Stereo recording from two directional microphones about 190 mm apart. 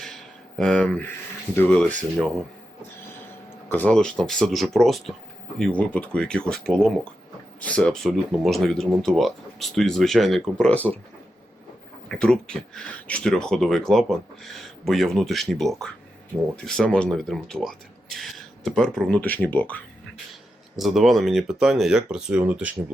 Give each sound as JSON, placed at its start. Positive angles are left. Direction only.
{"t": 0.6, "sound": "speech", "side_deg": 5}
{"t": 3.7, "sound": "speech", "side_deg": 10}
{"t": 12.0, "sound": "speech", "side_deg": 5}